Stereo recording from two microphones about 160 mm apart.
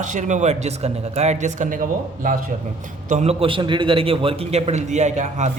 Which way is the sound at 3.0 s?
45° right (ahead or behind).